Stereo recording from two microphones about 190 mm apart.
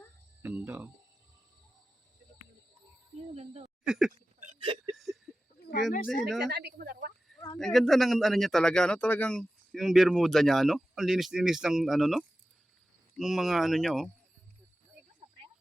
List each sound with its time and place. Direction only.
0.4 s speech: 10° right (ahead or behind)
3.3 s speech: 35° right (ahead or behind)
3.8 s speech: 5° right (ahead or behind)
4.6 s a sound: 25° right (ahead or behind)
6.2 s speech: centre (ahead or behind)
6.5 s speech: 60° right (ahead or behind)
7.6 s speech: centre (ahead or behind)